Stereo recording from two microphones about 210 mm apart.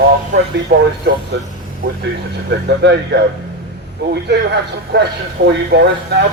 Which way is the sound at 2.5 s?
55° right (ahead or behind).